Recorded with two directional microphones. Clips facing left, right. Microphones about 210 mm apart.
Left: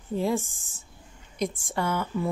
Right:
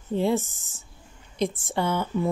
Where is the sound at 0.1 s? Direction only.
25° right (ahead or behind).